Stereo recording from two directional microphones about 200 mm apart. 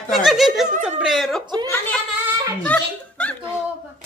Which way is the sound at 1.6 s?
10° left (ahead or behind).